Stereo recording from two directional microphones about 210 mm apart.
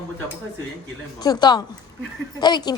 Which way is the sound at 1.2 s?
20° left (ahead or behind).